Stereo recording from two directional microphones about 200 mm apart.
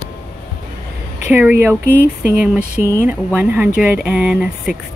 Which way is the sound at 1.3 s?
10° right (ahead or behind).